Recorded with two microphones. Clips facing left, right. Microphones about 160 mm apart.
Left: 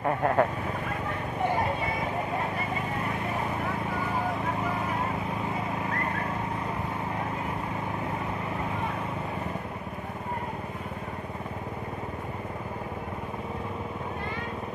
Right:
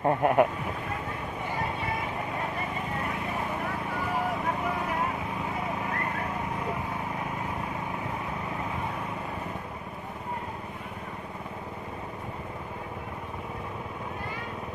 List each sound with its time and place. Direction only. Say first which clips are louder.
0.0 s speech: right 2 dB; 20° right (ahead or behind)